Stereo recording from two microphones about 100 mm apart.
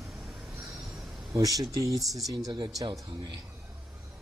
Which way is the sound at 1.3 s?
35° right (ahead or behind).